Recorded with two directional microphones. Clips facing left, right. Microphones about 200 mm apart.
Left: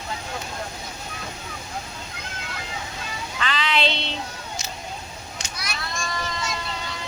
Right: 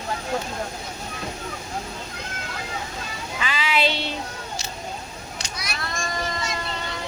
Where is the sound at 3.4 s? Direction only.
10° right (ahead or behind).